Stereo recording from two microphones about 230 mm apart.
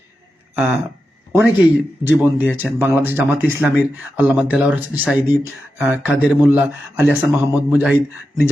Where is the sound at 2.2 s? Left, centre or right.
Centre.